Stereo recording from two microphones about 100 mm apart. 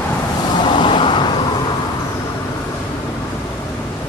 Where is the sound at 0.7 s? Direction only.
55° left (ahead or behind).